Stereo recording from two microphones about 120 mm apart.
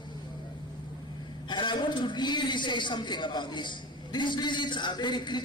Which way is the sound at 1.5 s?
40° left (ahead or behind).